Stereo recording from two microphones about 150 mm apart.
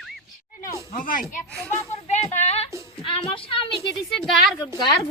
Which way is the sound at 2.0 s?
50° left (ahead or behind).